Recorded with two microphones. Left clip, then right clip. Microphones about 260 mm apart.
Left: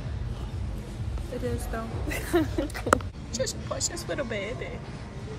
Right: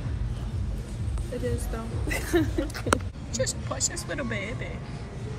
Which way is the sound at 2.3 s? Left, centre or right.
Centre.